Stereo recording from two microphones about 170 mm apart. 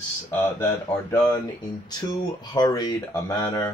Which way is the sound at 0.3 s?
10° left (ahead or behind).